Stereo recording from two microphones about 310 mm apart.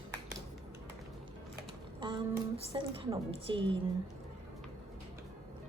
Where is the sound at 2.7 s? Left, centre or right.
Centre.